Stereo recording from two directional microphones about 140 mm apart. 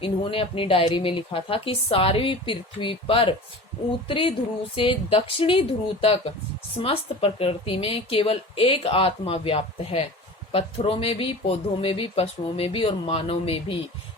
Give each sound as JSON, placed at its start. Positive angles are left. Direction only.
{"t": 0.0, "sound": "a woman's voice", "side_deg": 40}